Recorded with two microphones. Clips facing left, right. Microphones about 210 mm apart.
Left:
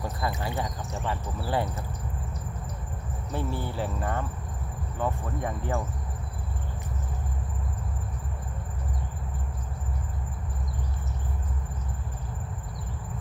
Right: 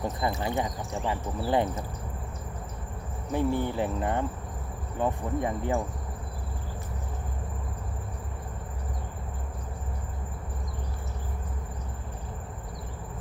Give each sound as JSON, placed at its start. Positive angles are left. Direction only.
{"t": 0.0, "sound": "speech", "side_deg": -20}
{"t": 3.3, "sound": "speech", "side_deg": -15}